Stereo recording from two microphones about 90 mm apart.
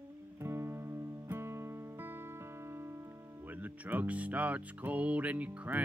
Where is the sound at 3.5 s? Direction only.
20° right (ahead or behind).